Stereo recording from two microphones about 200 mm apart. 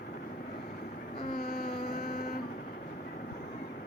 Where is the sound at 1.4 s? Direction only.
45° left (ahead or behind).